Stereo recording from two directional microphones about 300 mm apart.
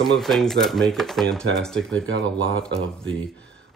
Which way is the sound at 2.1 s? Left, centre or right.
Right.